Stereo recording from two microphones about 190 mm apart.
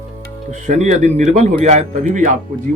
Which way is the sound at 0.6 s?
35° right (ahead or behind).